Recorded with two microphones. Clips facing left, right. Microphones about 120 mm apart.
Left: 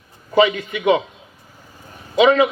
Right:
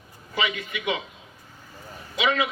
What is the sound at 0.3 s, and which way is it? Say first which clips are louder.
Speech: left 12 dB; 35° left (ahead or behind).